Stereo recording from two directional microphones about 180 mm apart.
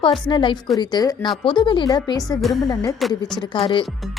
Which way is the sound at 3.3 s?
25° left (ahead or behind).